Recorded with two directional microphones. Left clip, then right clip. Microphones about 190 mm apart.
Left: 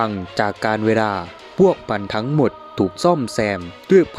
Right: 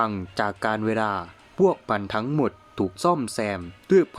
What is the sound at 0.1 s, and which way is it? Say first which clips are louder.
Speech: left 6 dB; 20° left (ahead or behind).